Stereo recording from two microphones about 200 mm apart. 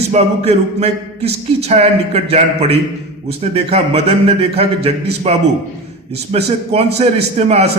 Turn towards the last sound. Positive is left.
turn(degrees=-30)  # may be behind; listen again after turning